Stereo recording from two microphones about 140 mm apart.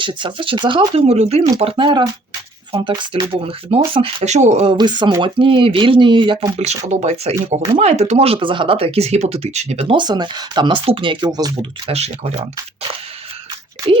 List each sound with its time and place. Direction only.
0.0 s speech: 35° right (ahead or behind)
1.7 s speech: 35° right (ahead or behind)
6.6 s speech: 50° right (ahead or behind)
9.8 s speech: 35° right (ahead or behind)
11.9 s speech: 45° right (ahead or behind)